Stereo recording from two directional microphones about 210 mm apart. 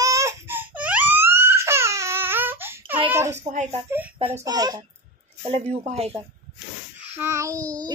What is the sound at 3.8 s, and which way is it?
Speech, 10° right (ahead or behind).